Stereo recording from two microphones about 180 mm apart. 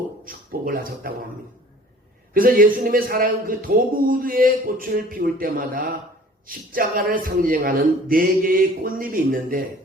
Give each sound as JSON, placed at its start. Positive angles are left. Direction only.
{"t": 0.3, "sound": "speech", "side_deg": -50}
{"t": 2.3, "sound": "speech", "side_deg": -50}